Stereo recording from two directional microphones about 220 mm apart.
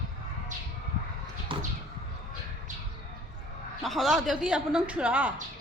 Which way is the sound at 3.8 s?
Centre (ahead or behind).